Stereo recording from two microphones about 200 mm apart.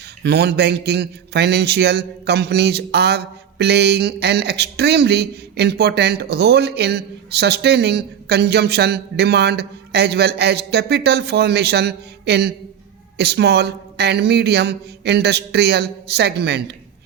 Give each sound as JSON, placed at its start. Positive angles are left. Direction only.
{"t": 0.2, "sound": "a man's voice", "side_deg": -55}